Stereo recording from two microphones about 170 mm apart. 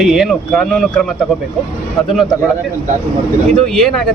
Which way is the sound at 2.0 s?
Centre (ahead or behind).